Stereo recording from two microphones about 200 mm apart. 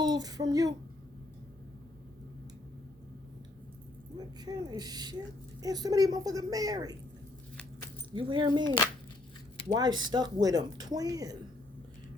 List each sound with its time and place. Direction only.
0.0 s a sound: 20° right (ahead or behind)
4.2 s speech: 20° right (ahead or behind)
8.1 s speech: 25° right (ahead or behind)